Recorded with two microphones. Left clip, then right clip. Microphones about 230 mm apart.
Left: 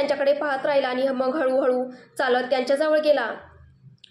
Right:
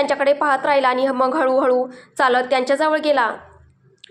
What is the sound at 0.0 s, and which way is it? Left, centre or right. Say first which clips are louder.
A woman's voice: right 4 dB; centre.